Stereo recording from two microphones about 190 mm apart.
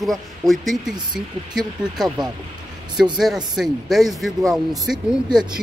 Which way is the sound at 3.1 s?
Centre (ahead or behind).